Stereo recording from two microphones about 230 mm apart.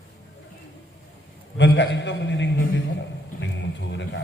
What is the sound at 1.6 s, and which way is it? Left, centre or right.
Speech, left.